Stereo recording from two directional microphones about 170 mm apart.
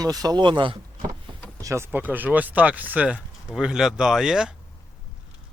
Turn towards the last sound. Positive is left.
turn(degrees=-5)  # may be behind; listen again after turning